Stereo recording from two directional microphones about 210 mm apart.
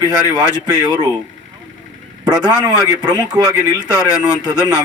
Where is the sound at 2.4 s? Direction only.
20° right (ahead or behind).